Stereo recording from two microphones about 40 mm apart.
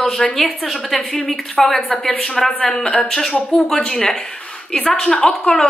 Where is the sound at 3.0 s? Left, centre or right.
Centre.